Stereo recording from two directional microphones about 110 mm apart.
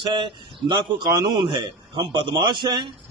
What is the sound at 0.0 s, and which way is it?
A man's voice, 45° right (ahead or behind).